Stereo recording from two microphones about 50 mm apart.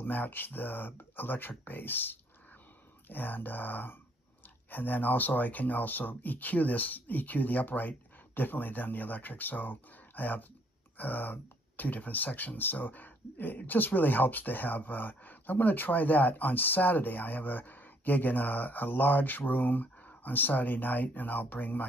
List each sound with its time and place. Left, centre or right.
0.0 s speech: left